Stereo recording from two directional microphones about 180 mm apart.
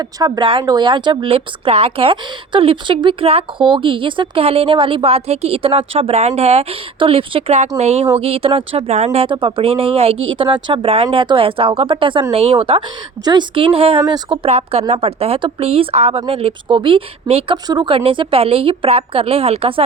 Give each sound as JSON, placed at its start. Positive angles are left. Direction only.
{"t": 0.0, "sound": "speech", "side_deg": -20}
{"t": 14.4, "sound": "speech", "side_deg": -35}